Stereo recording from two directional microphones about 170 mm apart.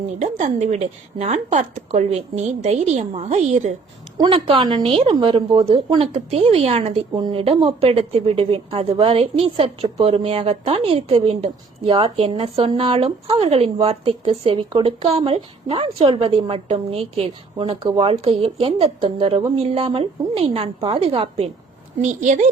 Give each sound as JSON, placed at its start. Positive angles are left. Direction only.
{"t": 0.2, "sound": "a woman's voice", "side_deg": -45}
{"t": 4.2, "sound": "a woman's voice", "side_deg": -30}
{"t": 22.0, "sound": "a woman's voice", "side_deg": -45}